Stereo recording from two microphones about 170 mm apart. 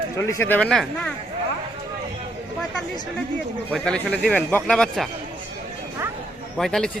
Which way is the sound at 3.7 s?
5° left (ahead or behind).